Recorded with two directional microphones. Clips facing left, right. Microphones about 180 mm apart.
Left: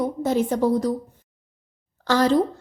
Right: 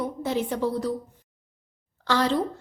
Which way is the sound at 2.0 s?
40° left (ahead or behind).